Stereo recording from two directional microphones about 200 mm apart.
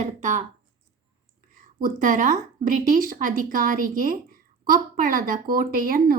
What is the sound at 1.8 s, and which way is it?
A woman's voice, 40° right (ahead or behind).